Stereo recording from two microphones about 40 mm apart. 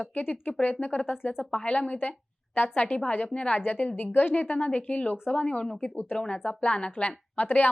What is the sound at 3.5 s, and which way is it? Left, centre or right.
A woman's voice, left.